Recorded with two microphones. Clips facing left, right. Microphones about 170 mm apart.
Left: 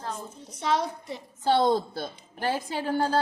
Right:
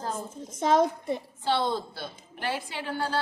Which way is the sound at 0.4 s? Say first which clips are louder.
Right 4 dB; 45° right (ahead or behind).